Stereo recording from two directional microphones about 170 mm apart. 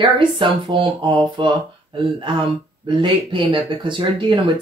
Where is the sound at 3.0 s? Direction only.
30° right (ahead or behind).